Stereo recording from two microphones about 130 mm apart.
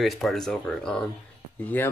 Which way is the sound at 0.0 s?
Centre (ahead or behind).